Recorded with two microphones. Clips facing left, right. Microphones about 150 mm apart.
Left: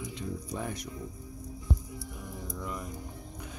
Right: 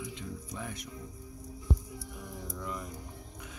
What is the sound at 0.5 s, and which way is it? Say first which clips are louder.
Speech: left 5 dB; 40° left (ahead or behind).